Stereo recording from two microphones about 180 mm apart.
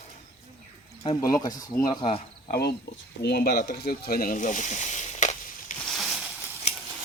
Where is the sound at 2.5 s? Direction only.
65° left (ahead or behind); by 5.7 s 40° left (ahead or behind).